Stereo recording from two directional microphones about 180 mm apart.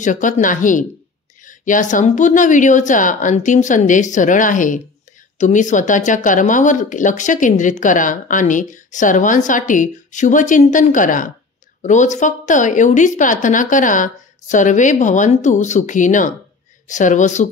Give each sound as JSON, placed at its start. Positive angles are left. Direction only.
{"t": 0.0, "sound": "speech", "side_deg": 45}